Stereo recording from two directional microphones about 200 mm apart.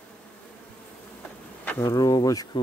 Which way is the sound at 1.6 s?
10° left (ahead or behind).